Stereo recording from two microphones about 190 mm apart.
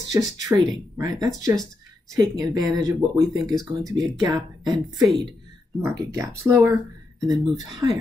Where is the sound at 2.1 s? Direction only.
15° right (ahead or behind).